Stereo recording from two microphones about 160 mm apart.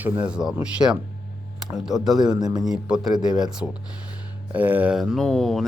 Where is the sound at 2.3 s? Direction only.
25° right (ahead or behind).